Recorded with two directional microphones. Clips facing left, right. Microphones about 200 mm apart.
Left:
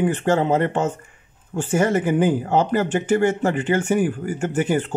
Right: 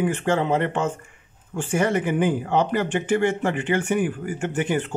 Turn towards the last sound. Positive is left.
turn(degrees=40)  # may be behind; listen again after turning